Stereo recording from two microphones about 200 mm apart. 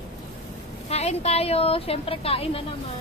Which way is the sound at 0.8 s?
30° left (ahead or behind).